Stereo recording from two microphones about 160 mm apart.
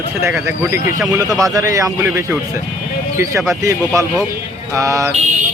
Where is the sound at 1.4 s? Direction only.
20° right (ahead or behind).